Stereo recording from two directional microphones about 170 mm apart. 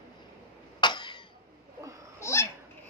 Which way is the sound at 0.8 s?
25° left (ahead or behind).